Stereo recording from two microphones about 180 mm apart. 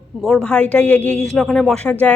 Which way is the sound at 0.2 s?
Centre (ahead or behind).